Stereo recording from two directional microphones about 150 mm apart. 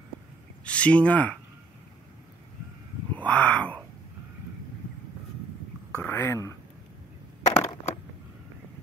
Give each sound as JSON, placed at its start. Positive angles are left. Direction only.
{"t": 0.7, "sound": "speech", "side_deg": 10}
{"t": 3.2, "sound": "speech", "side_deg": 10}
{"t": 5.9, "sound": "speech", "side_deg": 10}
{"t": 7.5, "sound": "a sound", "side_deg": 40}